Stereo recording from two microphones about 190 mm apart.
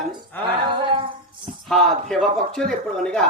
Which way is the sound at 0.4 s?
25° right (ahead or behind).